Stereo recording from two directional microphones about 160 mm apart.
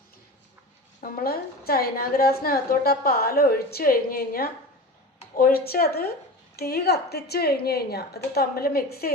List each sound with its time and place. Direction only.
1.0 s a woman's voice: 65° left (ahead or behind)